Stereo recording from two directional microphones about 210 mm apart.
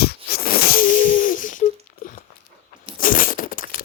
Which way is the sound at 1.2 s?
40° left (ahead or behind).